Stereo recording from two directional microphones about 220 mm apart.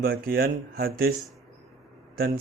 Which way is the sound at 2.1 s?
45° right (ahead or behind).